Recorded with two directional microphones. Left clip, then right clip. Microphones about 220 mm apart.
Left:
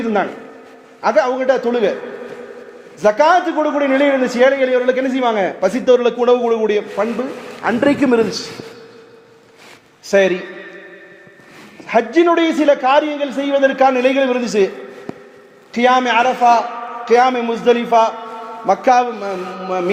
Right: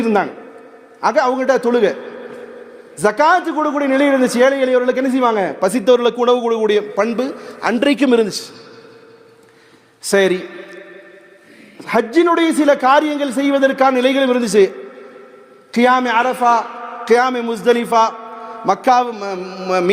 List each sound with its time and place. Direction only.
0.0 s a man's voice: 45° right (ahead or behind)
3.0 s a man's voice: 50° right (ahead or behind)
10.0 s a man's voice: 50° right (ahead or behind)
11.9 s a man's voice: 45° right (ahead or behind)
15.7 s a man's voice: 45° right (ahead or behind)